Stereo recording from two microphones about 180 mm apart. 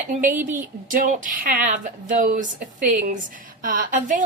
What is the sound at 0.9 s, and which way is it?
A woman's voice, 50° right (ahead or behind).